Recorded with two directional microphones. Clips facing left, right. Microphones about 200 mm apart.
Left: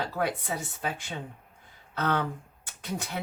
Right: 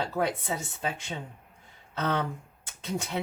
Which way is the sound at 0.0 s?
25° right (ahead or behind).